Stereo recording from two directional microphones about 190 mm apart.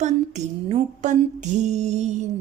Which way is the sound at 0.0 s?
40° right (ahead or behind).